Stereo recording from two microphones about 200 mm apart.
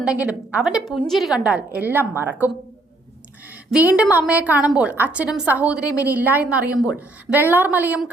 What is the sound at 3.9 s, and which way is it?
A woman's voice, 5° right (ahead or behind).